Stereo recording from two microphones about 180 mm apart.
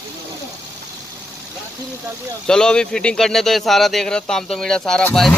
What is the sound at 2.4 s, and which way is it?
Speech, 5° left (ahead or behind).